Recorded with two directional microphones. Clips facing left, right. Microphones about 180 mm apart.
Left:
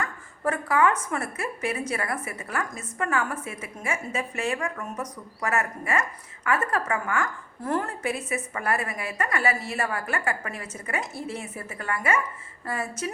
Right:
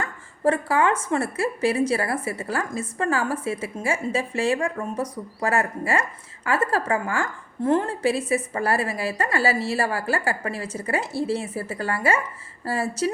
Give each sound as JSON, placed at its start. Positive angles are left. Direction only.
{"t": 0.0, "sound": "a woman's voice", "side_deg": -30}